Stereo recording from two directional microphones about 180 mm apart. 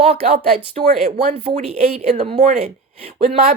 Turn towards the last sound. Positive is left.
turn(degrees=-35)  # may be behind; listen again after turning